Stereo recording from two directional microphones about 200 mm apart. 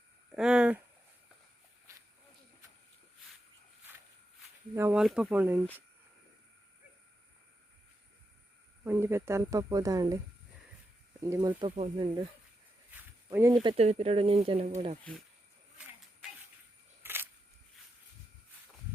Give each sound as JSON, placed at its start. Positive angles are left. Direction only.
{"t": 0.3, "sound": "a sound", "side_deg": -5}
{"t": 4.7, "sound": "speech", "side_deg": -10}
{"t": 8.8, "sound": "speech", "side_deg": -10}
{"t": 11.2, "sound": "speech", "side_deg": -15}
{"t": 12.9, "sound": "walk", "side_deg": -10}
{"t": 13.5, "sound": "speech", "side_deg": -25}
{"t": 17.0, "sound": "a sound", "side_deg": -10}